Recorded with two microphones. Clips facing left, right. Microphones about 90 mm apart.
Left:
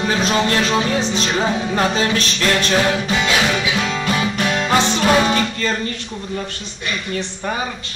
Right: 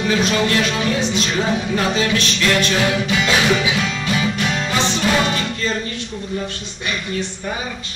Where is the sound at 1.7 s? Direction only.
35° left (ahead or behind).